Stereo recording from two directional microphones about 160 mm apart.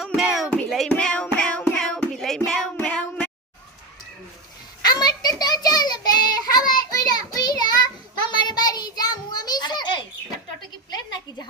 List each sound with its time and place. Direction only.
0.0 s music: centre (ahead or behind)
2.7 s child singing: 5° left (ahead or behind)
4.8 s child singing: 25° left (ahead or behind)
8.3 s a sound: 25° left (ahead or behind)